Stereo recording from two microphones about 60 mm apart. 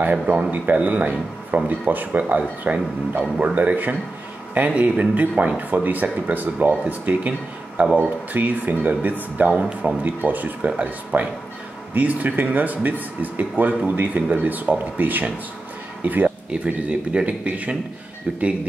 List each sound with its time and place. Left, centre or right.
0.0 s speech: right
3.5 s speech: right
16.4 s speech: centre